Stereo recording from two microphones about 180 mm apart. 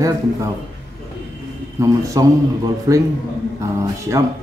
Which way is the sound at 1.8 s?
20° right (ahead or behind).